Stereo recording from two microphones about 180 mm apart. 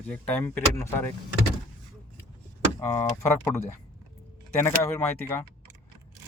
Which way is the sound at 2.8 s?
15° left (ahead or behind).